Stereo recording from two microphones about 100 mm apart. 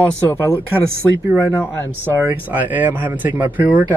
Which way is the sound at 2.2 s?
20° right (ahead or behind).